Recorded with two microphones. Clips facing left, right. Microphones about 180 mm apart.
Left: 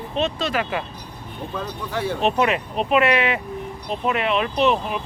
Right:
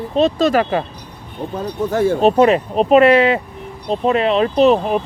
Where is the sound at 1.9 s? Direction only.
45° right (ahead or behind).